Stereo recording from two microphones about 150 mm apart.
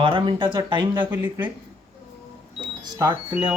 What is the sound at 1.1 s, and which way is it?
Speech, 15° right (ahead or behind).